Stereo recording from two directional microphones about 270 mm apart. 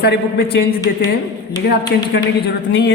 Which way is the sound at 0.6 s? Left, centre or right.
Left.